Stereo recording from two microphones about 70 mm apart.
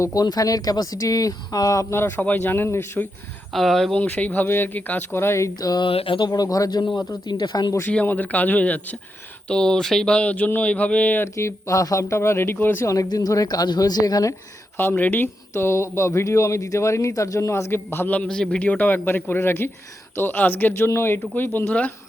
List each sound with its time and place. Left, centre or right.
0.0 s speech: left
1.9 s speech: left
3.5 s speech: centre
3.9 s speech: left
5.5 s a woman's voice: left
7.3 s speech: left
8.0 s speech: left
9.5 s a sound: centre
11.3 s speech: left
13.1 s a woman's voice: left
14.9 s speech: left
15.5 s a man's voice: left
18.1 s speech: centre